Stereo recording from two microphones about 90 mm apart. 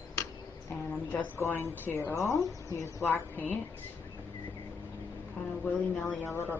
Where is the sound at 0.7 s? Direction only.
25° left (ahead or behind).